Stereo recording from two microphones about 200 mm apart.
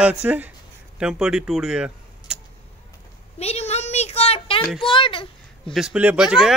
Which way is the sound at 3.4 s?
30° left (ahead or behind).